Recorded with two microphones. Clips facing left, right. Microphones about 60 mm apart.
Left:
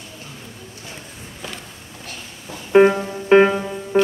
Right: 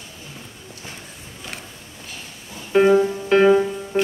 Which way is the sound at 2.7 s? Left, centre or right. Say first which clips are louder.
Left 1 dB; left.